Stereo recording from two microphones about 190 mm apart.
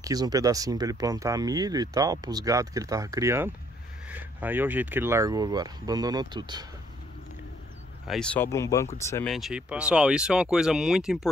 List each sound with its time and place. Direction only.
0.0 s speech: 20° right (ahead or behind)
8.1 s speech: 5° left (ahead or behind)
9.2 s speech: centre (ahead or behind)